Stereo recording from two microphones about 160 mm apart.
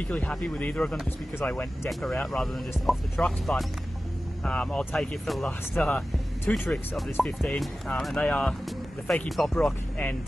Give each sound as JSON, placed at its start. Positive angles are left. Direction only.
{"t": 0.0, "sound": "speech", "side_deg": 10}